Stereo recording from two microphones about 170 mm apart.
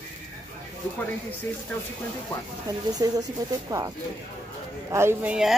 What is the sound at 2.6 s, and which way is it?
Speech, 20° right (ahead or behind).